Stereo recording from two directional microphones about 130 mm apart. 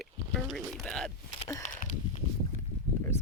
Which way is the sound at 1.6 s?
70° left (ahead or behind).